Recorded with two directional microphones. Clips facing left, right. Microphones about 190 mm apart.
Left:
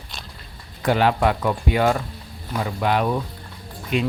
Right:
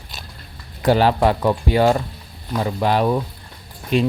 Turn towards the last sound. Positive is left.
turn(degrees=-35)  # may be behind; listen again after turning